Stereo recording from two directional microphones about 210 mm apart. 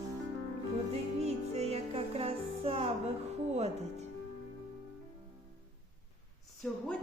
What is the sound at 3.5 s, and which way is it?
Speech, 30° right (ahead or behind).